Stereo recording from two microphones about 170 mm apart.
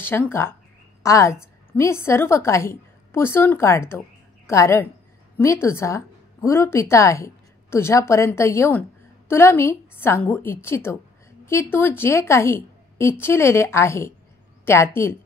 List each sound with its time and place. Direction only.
0.0 s a woman's voice: 10° left (ahead or behind)